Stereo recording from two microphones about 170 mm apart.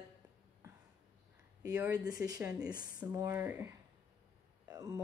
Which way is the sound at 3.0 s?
15° right (ahead or behind).